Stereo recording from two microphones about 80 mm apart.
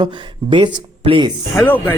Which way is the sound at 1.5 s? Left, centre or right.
Left.